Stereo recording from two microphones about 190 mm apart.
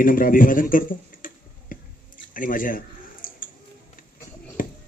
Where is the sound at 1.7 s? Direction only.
45° left (ahead or behind).